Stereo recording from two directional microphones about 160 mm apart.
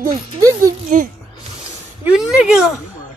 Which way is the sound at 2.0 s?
5° right (ahead or behind).